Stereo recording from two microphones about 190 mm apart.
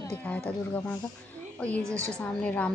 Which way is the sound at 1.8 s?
15° right (ahead or behind).